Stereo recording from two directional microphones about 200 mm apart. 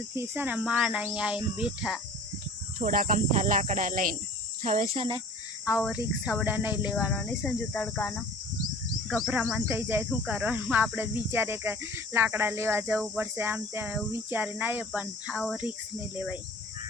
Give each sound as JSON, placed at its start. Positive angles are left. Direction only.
{"t": 0.1, "sound": "speech", "side_deg": -10}
{"t": 2.7, "sound": "speech", "side_deg": -40}
{"t": 5.6, "sound": "speech", "side_deg": 0}
{"t": 7.1, "sound": "speech", "side_deg": 5}
{"t": 9.6, "sound": "speech", "side_deg": -10}